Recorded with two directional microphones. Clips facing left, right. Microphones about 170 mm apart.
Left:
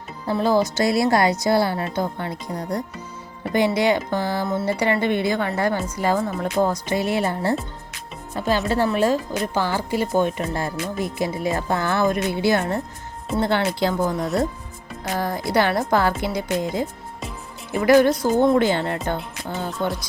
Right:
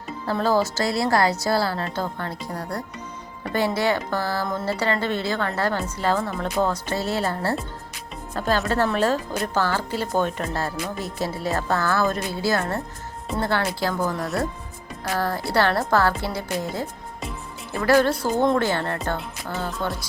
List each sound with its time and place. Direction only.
0.3 s a woman's voice: 10° left (ahead or behind)
8.6 s a woman's voice: 5° left (ahead or behind)